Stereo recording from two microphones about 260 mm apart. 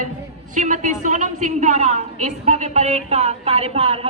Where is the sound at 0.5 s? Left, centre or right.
Right.